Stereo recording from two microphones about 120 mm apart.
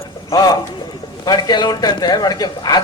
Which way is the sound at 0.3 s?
30° left (ahead or behind).